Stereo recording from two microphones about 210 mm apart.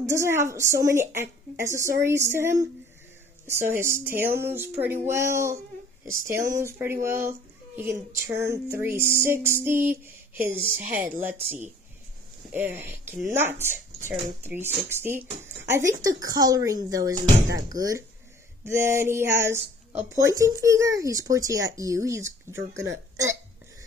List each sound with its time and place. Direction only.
0.0 s a woman's voice: 15° right (ahead or behind)